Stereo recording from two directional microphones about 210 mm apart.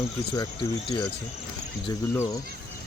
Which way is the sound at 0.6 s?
15° left (ahead or behind).